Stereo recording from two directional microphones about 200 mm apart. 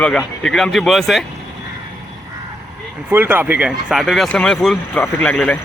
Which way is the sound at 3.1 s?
10° right (ahead or behind).